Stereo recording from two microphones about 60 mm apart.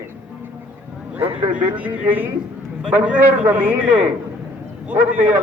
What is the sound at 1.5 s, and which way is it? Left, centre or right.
A man's voice, right.